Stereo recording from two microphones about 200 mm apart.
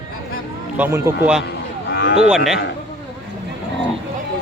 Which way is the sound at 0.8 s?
15° right (ahead or behind).